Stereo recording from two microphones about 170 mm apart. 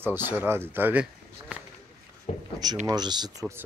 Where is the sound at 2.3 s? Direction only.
40° left (ahead or behind).